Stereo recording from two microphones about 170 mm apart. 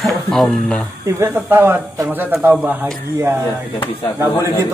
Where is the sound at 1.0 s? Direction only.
15° right (ahead or behind).